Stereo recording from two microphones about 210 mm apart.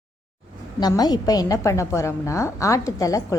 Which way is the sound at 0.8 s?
20° left (ahead or behind).